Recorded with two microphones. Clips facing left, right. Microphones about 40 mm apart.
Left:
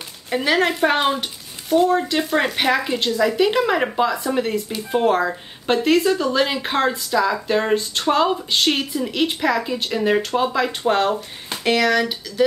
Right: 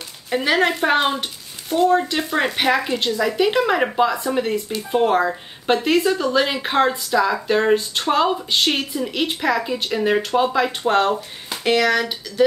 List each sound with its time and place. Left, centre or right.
0.3 s speech: centre